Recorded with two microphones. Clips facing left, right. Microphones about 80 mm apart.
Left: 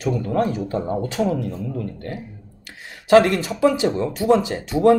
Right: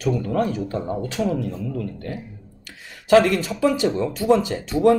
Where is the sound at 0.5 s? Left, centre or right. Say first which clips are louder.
Left 2 dB; left.